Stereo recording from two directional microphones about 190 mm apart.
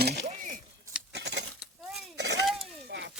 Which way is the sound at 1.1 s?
65° right (ahead or behind).